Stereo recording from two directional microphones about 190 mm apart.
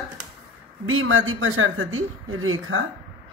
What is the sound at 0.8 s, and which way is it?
Speech, 90° right.